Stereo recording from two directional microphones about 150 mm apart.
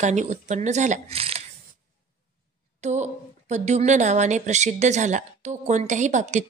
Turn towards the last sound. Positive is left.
turn(degrees=-55)  # may be behind; listen again after turning